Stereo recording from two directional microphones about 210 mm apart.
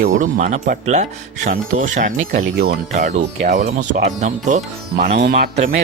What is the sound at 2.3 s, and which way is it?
Speech, 50° right (ahead or behind).